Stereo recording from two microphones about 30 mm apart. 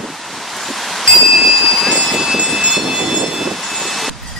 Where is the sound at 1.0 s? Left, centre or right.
Centre.